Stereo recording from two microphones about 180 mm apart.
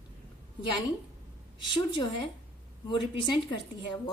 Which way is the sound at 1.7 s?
25° left (ahead or behind).